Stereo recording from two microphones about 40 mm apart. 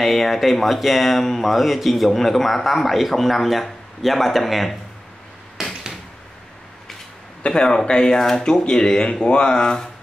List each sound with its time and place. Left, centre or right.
0.0 s speech: centre
7.4 s speech: left